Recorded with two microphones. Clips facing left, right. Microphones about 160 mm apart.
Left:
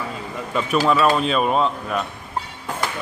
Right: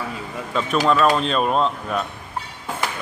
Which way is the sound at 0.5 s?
5° left (ahead or behind).